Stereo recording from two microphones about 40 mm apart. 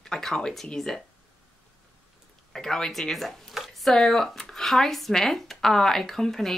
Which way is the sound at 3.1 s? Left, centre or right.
Centre.